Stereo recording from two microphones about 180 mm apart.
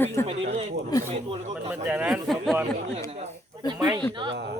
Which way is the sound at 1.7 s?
10° right (ahead or behind).